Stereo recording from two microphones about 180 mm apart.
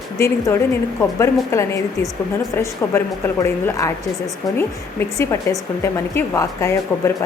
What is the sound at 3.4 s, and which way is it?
Speech, 15° left (ahead or behind).